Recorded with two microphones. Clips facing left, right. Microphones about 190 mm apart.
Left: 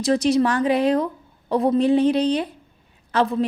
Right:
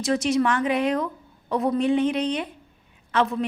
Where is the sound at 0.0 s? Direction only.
35° left (ahead or behind).